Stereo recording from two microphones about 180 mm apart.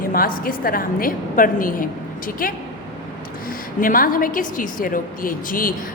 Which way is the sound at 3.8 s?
50° left (ahead or behind).